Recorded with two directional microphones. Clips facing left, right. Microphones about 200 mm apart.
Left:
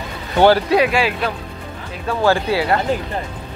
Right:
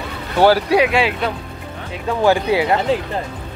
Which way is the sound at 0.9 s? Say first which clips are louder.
Right 1 dB; 20° right (ahead or behind).